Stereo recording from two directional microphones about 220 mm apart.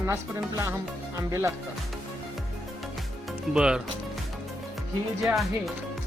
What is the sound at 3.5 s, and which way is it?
Speech, 5° right (ahead or behind).